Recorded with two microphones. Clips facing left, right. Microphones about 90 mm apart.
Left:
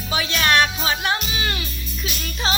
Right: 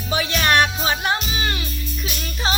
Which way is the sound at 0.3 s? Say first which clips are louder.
Even; 20° right (ahead or behind).